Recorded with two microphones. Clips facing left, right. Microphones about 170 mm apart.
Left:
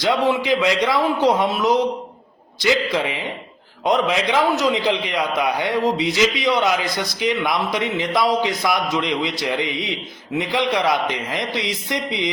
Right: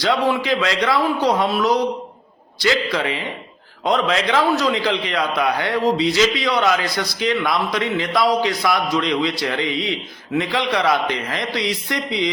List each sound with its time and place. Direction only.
0.0 s a man's voice: 20° left (ahead or behind)